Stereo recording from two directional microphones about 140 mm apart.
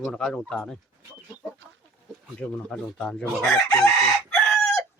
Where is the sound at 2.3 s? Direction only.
10° left (ahead or behind).